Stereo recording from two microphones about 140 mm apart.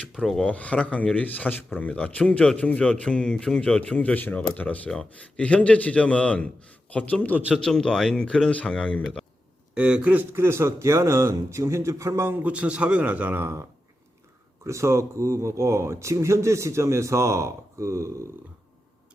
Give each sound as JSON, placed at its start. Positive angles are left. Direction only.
{"t": 0.0, "sound": "speech", "side_deg": 5}
{"t": 9.7, "sound": "speech", "side_deg": -10}